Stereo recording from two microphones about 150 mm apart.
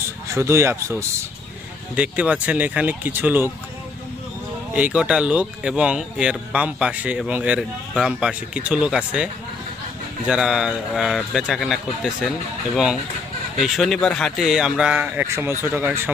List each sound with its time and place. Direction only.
0.3 s speech: 20° right (ahead or behind)
2.0 s speech: 10° right (ahead or behind)
4.7 s speech: 10° right (ahead or behind)